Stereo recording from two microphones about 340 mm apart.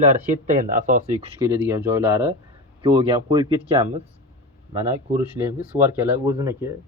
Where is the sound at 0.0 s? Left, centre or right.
Right.